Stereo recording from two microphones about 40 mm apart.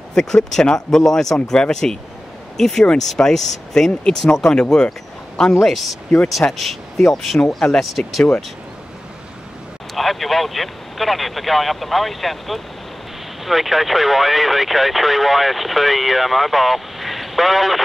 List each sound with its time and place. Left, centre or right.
0.1 s speech: centre
1.0 s speech: centre
8.0 s speech: left
9.9 s speech: centre